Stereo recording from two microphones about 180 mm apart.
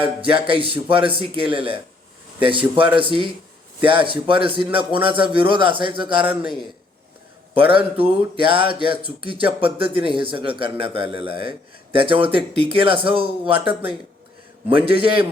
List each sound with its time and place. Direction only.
0.4 s speech: 30° right (ahead or behind)
7.5 s a man's voice: 30° right (ahead or behind)